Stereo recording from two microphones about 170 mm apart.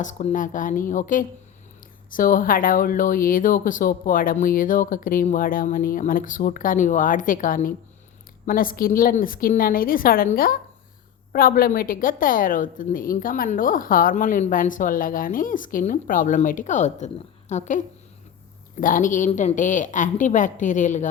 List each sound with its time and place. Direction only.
0.0 s a woman's voice: 45° left (ahead or behind)